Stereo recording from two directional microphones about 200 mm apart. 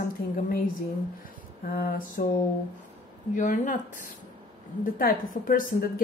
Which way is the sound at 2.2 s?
40° left (ahead or behind).